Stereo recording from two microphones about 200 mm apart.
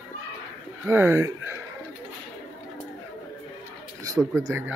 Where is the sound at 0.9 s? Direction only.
10° right (ahead or behind).